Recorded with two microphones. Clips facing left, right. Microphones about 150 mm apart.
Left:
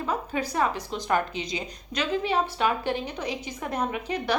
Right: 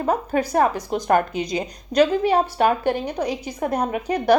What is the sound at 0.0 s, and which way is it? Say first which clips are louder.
A woman's voice: right 7 dB; 45° right (ahead or behind).